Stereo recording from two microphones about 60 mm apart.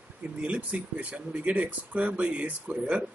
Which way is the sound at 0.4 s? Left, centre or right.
Right.